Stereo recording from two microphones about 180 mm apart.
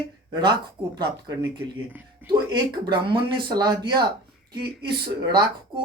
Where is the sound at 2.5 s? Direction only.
25° right (ahead or behind).